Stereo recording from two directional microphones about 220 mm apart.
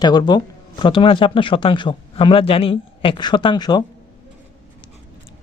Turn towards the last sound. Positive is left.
turn(degrees=20)  # may be behind; listen again after turning